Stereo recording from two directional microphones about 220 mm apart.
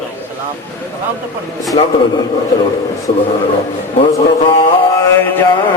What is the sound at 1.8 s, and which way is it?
Speech, 20° left (ahead or behind).